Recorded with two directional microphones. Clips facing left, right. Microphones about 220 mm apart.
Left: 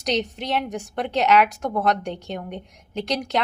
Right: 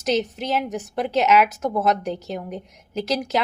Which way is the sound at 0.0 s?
5° right (ahead or behind).